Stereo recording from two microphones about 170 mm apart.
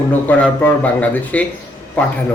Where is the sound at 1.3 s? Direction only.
10° left (ahead or behind).